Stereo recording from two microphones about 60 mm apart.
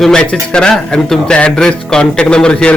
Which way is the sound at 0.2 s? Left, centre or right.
Centre.